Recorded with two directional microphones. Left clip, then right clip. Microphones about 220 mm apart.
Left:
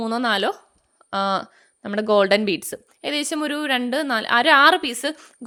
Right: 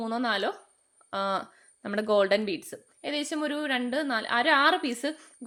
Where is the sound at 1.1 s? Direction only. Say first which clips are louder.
Left 7 dB; 35° left (ahead or behind).